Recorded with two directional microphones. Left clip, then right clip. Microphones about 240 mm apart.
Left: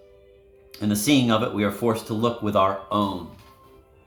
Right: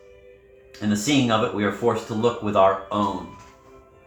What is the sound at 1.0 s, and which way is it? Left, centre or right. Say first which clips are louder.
Speech: even; left.